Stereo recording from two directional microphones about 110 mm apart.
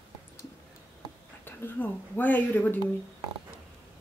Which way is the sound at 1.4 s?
20° left (ahead or behind).